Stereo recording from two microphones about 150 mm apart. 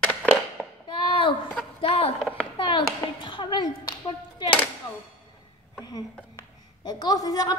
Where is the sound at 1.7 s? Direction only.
40° left (ahead or behind).